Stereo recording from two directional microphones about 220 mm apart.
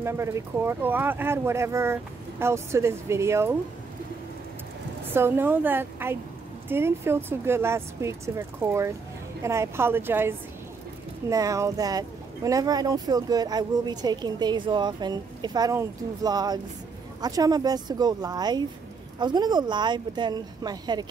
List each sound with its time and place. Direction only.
0.0 s speech: 10° right (ahead or behind)
5.1 s speech: 10° right (ahead or behind)